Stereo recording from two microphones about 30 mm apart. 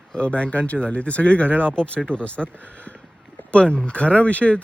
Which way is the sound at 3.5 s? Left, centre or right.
Left.